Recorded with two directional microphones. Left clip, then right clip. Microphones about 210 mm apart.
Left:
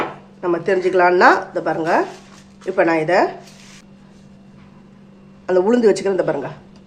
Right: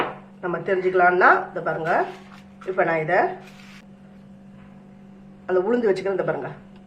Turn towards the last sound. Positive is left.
turn(degrees=15)  # may be behind; listen again after turning